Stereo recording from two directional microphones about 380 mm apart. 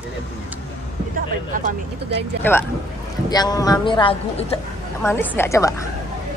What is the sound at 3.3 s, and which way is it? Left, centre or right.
A man's voice, centre.